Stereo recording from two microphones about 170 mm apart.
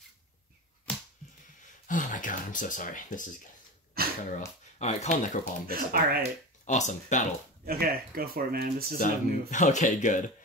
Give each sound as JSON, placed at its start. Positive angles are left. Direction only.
{"t": 0.9, "sound": "a sound", "side_deg": 5}
{"t": 1.9, "sound": "speech", "side_deg": 50}
{"t": 4.0, "sound": "a sound", "side_deg": -65}
{"t": 4.7, "sound": "speech", "side_deg": 45}
{"t": 5.7, "sound": "speech", "side_deg": -60}
{"t": 6.6, "sound": "speech", "side_deg": 45}
{"t": 7.6, "sound": "speech", "side_deg": -60}
{"t": 8.9, "sound": "speech", "side_deg": 50}